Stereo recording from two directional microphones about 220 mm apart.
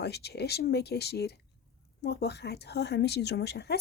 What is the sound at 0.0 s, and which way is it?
A woman's voice, 50° left (ahead or behind).